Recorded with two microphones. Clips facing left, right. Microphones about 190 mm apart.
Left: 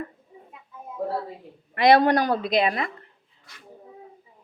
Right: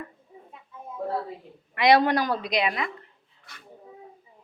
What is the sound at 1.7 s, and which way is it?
Speech, 45° left (ahead or behind).